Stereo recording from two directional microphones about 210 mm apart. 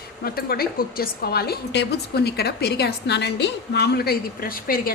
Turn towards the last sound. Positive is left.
turn(degrees=45)  # may be behind; listen again after turning